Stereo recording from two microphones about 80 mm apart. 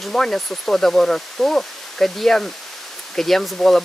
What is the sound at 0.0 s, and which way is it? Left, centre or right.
Speech, centre.